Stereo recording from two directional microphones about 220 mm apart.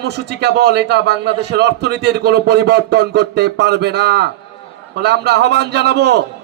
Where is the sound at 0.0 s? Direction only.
50° right (ahead or behind).